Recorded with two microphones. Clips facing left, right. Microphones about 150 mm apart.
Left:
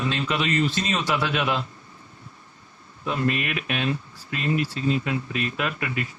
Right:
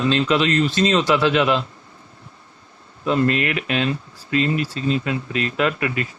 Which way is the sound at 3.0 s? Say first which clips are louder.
Right 6 dB; 90° right.